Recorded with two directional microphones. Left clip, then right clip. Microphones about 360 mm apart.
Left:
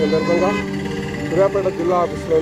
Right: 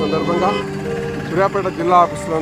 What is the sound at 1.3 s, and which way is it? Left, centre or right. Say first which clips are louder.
Speech: left 1 dB; right.